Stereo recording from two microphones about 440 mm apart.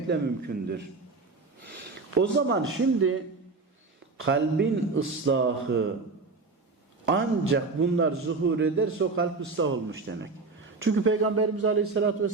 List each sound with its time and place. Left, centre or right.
0.1 s a man's voice: right
2.3 s a man's voice: right
4.2 s a man's voice: right
7.1 s a man's voice: right